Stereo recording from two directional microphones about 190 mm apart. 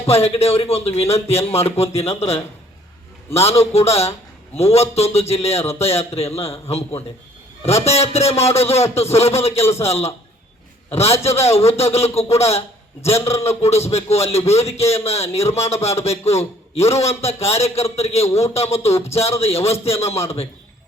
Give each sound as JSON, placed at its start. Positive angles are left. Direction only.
{"t": 0.0, "sound": "speech", "side_deg": 30}
{"t": 7.6, "sound": "speech", "side_deg": 35}
{"t": 13.1, "sound": "a man's voice", "side_deg": 15}
{"t": 13.8, "sound": "speech", "side_deg": 35}